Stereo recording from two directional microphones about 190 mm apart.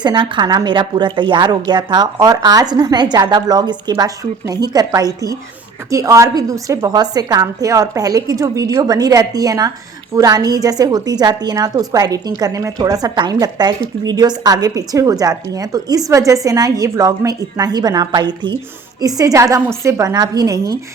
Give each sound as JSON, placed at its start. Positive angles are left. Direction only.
{"t": 0.0, "sound": "a woman's voice", "side_deg": -25}